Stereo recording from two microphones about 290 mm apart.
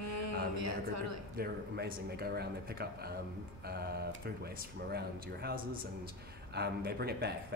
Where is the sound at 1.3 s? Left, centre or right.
Right.